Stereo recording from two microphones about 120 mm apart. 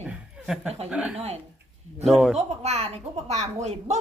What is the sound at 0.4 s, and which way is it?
Speech, 5° right (ahead or behind).